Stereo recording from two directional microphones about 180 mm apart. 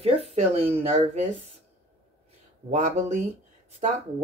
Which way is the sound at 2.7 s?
40° right (ahead or behind).